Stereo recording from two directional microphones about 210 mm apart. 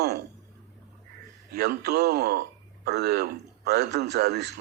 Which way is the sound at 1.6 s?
50° right (ahead or behind).